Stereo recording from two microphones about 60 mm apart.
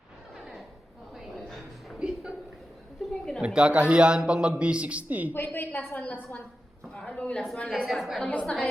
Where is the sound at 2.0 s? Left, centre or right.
Centre.